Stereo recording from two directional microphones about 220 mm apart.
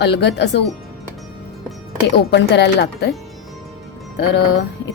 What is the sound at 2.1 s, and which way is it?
Speech, 50° left (ahead or behind).